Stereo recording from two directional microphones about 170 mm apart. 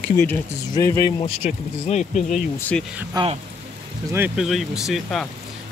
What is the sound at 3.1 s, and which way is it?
Speech, 25° right (ahead or behind).